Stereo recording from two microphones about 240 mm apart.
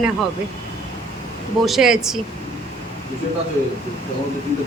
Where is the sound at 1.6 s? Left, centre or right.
Centre.